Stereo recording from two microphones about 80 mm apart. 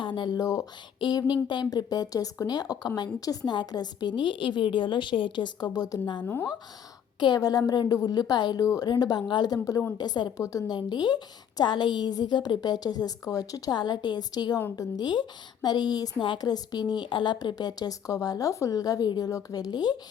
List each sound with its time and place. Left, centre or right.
0.0 s speech: left
0.3 s speech: left
0.9 s speech: left
7.3 s a woman's voice: left
8.6 s speech: left
8.9 s a woman's voice: left
10.3 s speech: left
10.7 s a woman's voice: left